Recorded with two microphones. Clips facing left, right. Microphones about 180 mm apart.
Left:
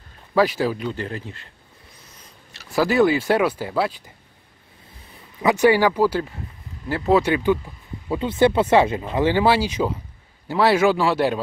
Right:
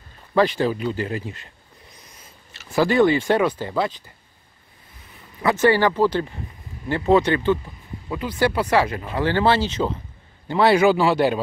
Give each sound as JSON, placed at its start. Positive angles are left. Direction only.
{"t": 0.3, "sound": "speech", "side_deg": 5}
{"t": 2.5, "sound": "speech", "side_deg": 0}
{"t": 5.4, "sound": "speech", "side_deg": 15}
{"t": 8.1, "sound": "speech", "side_deg": 25}